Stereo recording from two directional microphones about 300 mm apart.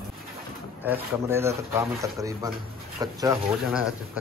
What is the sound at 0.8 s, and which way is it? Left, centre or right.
Speech, centre.